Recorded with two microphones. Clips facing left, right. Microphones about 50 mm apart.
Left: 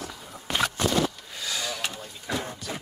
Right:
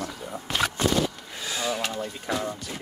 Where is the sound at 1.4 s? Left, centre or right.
Right.